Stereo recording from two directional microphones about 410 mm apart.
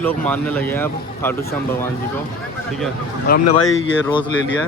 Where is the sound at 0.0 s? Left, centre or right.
Centre.